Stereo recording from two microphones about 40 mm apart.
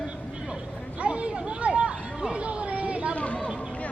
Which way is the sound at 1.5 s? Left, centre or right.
Right.